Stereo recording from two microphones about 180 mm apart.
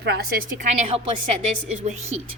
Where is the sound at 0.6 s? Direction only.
40° right (ahead or behind).